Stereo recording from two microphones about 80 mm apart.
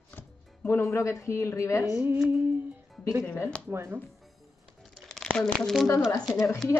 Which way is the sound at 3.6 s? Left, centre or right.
Right.